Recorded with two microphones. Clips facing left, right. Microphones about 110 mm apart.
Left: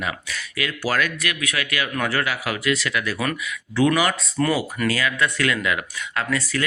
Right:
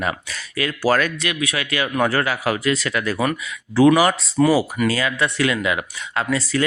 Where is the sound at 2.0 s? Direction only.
40° right (ahead or behind).